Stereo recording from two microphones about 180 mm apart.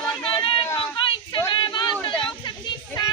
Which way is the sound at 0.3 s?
30° left (ahead or behind).